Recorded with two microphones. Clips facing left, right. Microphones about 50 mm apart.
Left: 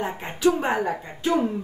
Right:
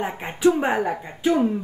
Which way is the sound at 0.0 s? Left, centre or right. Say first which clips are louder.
Right 2 dB; centre.